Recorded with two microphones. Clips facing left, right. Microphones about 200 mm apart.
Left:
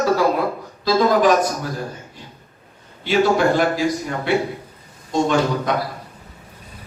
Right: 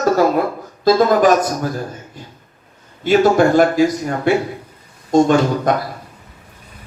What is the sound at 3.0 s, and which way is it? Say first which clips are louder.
A man's voice: right 4 dB; 45° right (ahead or behind).